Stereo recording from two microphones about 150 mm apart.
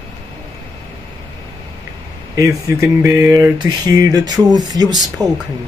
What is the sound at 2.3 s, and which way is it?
Speech, 20° right (ahead or behind).